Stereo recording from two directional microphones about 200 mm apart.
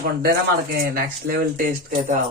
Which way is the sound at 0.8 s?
50° right (ahead or behind).